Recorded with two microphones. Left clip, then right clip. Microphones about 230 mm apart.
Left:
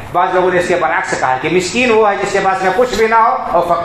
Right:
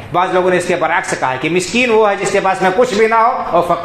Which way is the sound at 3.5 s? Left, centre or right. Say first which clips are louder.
Right 1 dB; right.